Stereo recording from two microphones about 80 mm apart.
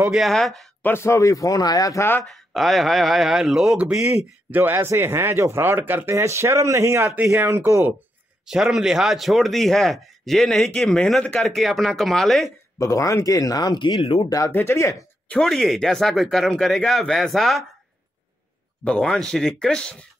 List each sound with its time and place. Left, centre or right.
0.1 s speech: centre
0.8 s a man's voice: left
2.5 s speech: centre
4.5 s speech: right
8.5 s speech: centre
12.7 s a man's voice: left
14.5 s speech: left
15.4 s speech: centre
18.9 s speech: centre